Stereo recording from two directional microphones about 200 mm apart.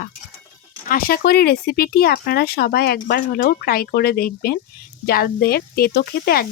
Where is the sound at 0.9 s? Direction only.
45° left (ahead or behind).